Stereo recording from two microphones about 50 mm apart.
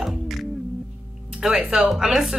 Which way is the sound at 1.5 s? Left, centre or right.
Right.